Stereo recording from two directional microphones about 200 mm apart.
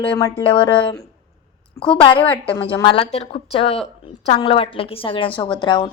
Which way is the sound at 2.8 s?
25° left (ahead or behind).